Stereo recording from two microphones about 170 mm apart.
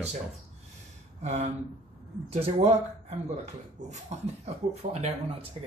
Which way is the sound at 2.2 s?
40° right (ahead or behind).